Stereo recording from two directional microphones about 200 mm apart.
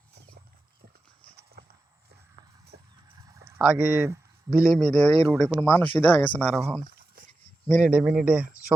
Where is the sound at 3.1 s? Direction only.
20° right (ahead or behind).